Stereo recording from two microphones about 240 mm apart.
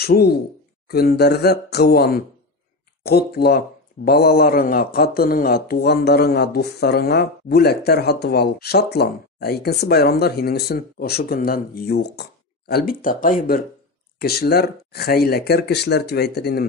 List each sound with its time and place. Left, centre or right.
0.0 s speech: left